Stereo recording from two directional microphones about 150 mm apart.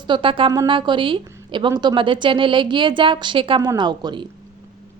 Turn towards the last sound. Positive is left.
turn(degrees=-30)  # may be behind; listen again after turning